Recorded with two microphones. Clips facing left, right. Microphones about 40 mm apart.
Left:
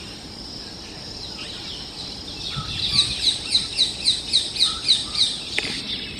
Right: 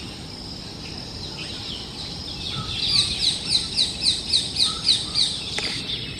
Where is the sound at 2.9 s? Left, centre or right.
Left.